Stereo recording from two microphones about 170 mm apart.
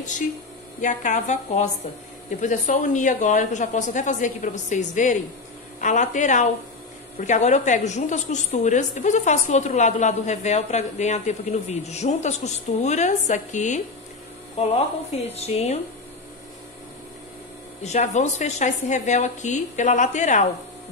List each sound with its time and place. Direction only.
0.7 s a woman's voice: 45° left (ahead or behind)
15.3 s speech: 40° left (ahead or behind)
17.8 s a woman's voice: 40° left (ahead or behind)